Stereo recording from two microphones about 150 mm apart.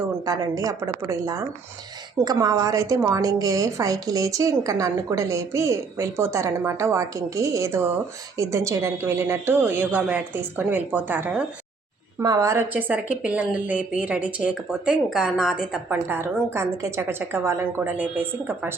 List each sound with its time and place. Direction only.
0.3 s a woman's voice: 25° right (ahead or behind)
12.2 s a woman's voice: 25° right (ahead or behind)